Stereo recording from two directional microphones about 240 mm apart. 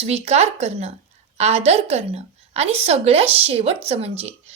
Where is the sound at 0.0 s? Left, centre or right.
Right.